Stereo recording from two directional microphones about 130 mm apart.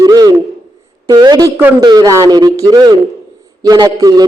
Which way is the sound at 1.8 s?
30° right (ahead or behind).